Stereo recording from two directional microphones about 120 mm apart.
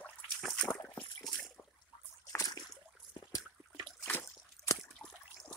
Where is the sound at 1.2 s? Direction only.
5° left (ahead or behind).